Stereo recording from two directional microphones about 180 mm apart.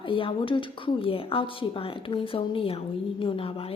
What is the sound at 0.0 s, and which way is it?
Speech, 30° left (ahead or behind).